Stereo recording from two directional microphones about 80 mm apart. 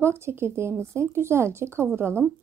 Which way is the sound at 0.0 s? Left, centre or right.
Right.